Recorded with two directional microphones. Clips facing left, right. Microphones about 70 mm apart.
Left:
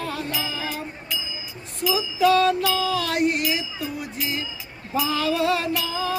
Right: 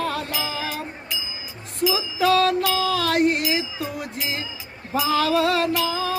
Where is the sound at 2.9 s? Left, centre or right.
Right.